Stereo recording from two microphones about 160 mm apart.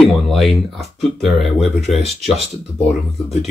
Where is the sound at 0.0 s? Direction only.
Centre (ahead or behind).